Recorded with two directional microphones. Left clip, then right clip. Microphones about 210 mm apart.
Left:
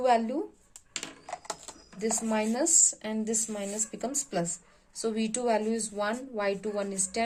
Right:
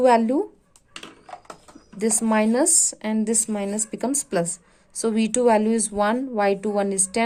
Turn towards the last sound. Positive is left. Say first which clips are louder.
# right 8 dB
turn(degrees=-45)  # may be behind; listen again after turning